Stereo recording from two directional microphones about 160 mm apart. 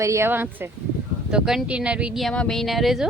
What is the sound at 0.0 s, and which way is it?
Speech, 15° right (ahead or behind).